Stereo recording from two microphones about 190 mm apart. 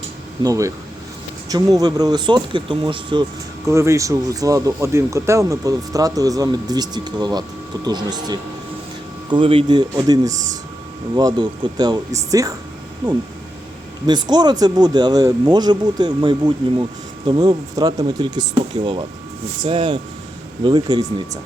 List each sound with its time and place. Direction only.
0.4 s speech: 15° right (ahead or behind)
3.7 s speech: 15° right (ahead or behind)